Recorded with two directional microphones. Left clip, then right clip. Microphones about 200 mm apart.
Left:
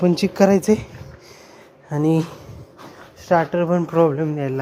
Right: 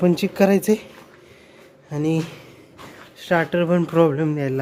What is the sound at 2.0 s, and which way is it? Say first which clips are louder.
Speech: left 3 dB; 15° left (ahead or behind).